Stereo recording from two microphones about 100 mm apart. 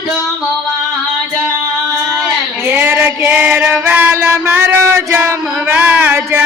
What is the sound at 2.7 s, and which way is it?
Music, 20° right (ahead or behind).